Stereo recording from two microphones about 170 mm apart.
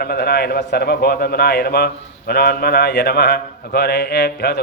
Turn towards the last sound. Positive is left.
turn(degrees=80)